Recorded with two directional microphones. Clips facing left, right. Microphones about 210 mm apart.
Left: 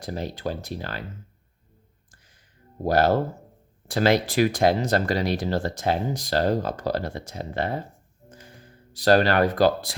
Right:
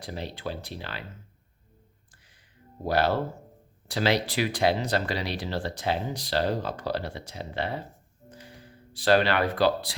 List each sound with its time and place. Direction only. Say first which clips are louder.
0.0 s speech: left 5 dB; 45° left (ahead or behind)
2.8 s speech: left 4 dB; 45° left (ahead or behind)
8.3 s music: right 1 dB; 45° left (ahead or behind)